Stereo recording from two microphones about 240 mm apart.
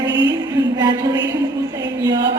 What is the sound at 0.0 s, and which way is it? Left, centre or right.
Music, right.